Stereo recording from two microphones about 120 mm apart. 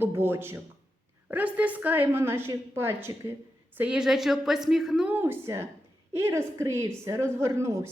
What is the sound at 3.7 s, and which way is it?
A woman's voice, 10° right (ahead or behind).